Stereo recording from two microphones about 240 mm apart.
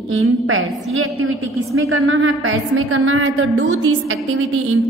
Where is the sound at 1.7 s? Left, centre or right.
Right.